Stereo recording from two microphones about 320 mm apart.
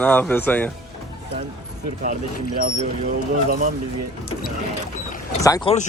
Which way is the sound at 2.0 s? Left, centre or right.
Right.